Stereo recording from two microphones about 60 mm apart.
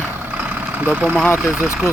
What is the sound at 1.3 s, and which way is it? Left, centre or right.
Speech, left.